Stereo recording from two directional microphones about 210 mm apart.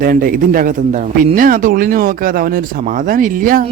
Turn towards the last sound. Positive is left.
turn(degrees=-40)  # may be behind; listen again after turning